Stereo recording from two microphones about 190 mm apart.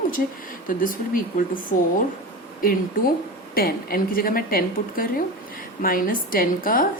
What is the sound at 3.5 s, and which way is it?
A woman's voice, 50° left (ahead or behind).